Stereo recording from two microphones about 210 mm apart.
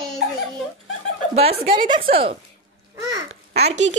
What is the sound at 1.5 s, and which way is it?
Speech, 45° right (ahead or behind).